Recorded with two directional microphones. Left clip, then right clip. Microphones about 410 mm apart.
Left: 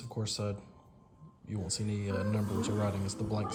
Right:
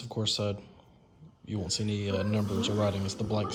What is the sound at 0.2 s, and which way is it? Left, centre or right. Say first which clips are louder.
Speech: right 7 dB; centre.